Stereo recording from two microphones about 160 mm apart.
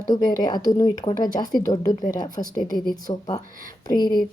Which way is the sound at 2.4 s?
30° left (ahead or behind).